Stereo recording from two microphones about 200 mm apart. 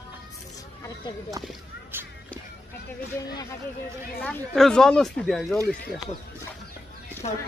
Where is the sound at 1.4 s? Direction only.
20° right (ahead or behind).